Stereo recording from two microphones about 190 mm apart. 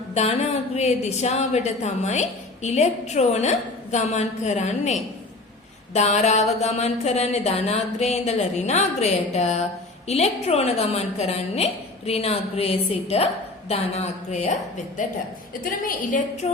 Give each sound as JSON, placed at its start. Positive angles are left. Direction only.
{"t": 0.1, "sound": "a woman's voice", "side_deg": 35}